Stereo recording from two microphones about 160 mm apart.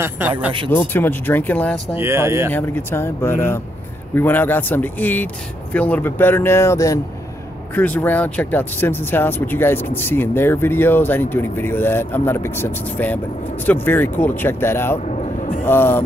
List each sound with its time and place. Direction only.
0.7 s speech: 10° left (ahead or behind)
2.0 s speech: 15° right (ahead or behind)
2.5 s speech: 15° left (ahead or behind)
15.0 s vehicle: 55° left (ahead or behind)
15.6 s speech: 15° left (ahead or behind)